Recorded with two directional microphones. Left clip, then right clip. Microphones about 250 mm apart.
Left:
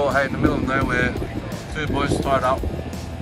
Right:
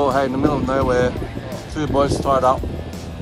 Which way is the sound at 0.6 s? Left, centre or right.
Centre.